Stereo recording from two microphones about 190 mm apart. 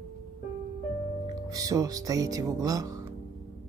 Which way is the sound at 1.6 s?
20° right (ahead or behind).